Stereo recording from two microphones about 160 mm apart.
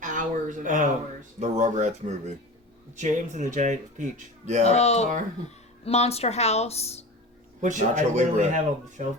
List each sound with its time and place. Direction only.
0.0 s a sound: 55° right (ahead or behind)
1.4 s speech: 50° right (ahead or behind)
4.6 s speech: 40° left (ahead or behind)
7.6 s speech: 50° right (ahead or behind)